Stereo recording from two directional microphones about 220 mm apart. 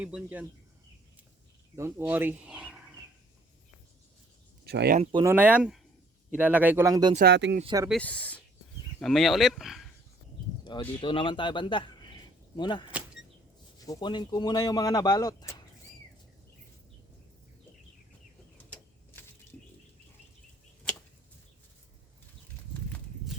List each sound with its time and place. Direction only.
0.0 s speech: 5° right (ahead or behind)
1.7 s speech: 10° right (ahead or behind)
4.6 s speech: 45° right (ahead or behind)
5.2 s speech: 10° right (ahead or behind)
7.2 s speech: 50° right (ahead or behind)
7.6 s speech: 20° right (ahead or behind)
7.9 s speech: 5° left (ahead or behind)
10.6 s speech: 20° left (ahead or behind)
18.5 s a sound: 5° left (ahead or behind)